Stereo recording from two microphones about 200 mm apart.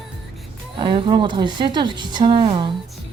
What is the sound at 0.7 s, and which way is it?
A woman's voice, 25° right (ahead or behind).